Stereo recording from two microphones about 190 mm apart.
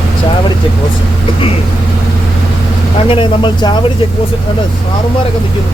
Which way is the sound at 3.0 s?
25° left (ahead or behind).